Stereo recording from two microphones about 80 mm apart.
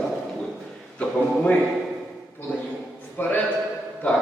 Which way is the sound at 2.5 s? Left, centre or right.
Left.